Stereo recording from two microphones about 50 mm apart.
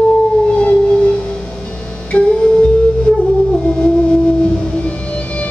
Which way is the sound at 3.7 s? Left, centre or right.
Centre.